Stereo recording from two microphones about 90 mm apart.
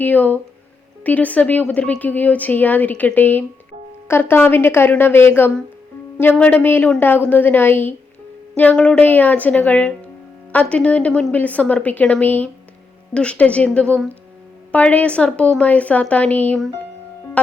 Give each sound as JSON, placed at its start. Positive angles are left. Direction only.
{"t": 0.0, "sound": "a woman's voice", "side_deg": 20}
{"t": 17.4, "sound": "music", "side_deg": 15}